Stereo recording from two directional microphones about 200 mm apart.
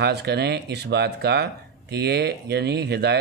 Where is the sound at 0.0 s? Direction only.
55° right (ahead or behind).